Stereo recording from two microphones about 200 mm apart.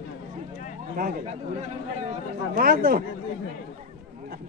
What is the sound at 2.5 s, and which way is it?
Speech, 45° right (ahead or behind).